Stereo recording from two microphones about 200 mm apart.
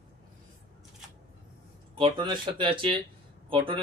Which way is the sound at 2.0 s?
20° right (ahead or behind).